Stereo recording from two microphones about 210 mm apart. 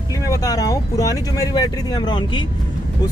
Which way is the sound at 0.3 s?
15° left (ahead or behind).